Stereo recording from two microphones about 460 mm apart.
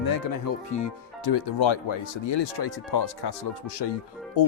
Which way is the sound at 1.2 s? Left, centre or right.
Left.